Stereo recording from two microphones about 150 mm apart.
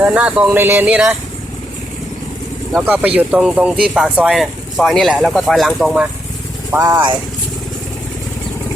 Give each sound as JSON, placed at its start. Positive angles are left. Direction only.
{"t": 0.0, "sound": "speech", "side_deg": -10}
{"t": 2.8, "sound": "speech", "side_deg": -10}
{"t": 6.7, "sound": "speech", "side_deg": -15}